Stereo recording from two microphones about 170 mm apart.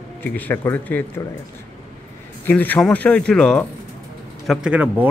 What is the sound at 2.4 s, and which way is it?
Speech, 10° left (ahead or behind).